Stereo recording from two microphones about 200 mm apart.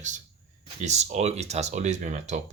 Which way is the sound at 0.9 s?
35° right (ahead or behind).